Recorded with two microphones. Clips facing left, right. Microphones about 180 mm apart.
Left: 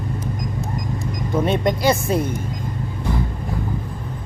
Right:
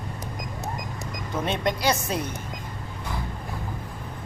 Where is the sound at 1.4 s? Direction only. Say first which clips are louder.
Left 6 dB; 50° left (ahead or behind).